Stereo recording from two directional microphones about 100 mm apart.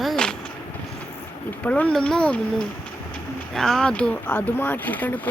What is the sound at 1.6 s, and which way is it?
Speech, 10° left (ahead or behind).